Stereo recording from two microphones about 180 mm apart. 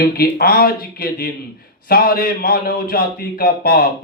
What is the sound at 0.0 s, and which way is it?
A man's voice, 55° left (ahead or behind).